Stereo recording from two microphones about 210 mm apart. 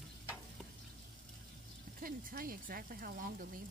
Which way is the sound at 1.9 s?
40° right (ahead or behind).